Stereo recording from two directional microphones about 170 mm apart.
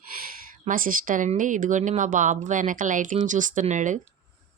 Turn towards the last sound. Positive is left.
turn(degrees=-45)  # may be behind; listen again after turning